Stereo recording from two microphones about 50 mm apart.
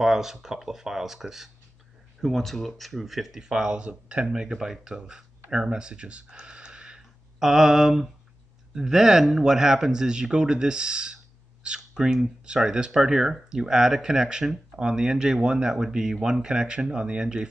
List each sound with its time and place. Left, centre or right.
0.0 s speech: centre
7.3 s a sound: centre
8.7 s speech: centre